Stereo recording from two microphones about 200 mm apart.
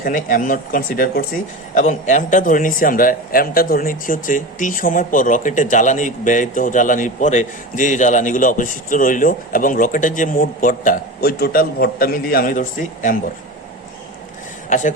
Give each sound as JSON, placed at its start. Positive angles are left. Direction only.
{"t": 0.0, "sound": "a man's voice", "side_deg": 40}
{"t": 14.7, "sound": "speech", "side_deg": 40}